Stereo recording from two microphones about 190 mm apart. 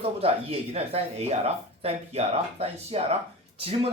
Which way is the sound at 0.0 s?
30° right (ahead or behind).